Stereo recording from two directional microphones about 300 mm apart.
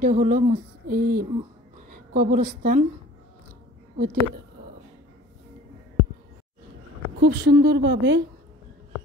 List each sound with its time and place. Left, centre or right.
0.0 s speech: right
4.0 s speech: right
7.2 s a woman's voice: right